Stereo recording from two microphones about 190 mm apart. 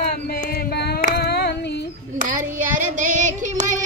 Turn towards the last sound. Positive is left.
turn(degrees=-40)  # may be behind; listen again after turning